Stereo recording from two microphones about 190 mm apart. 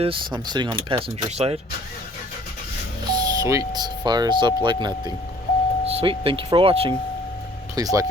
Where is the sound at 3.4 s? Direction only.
15° right (ahead or behind).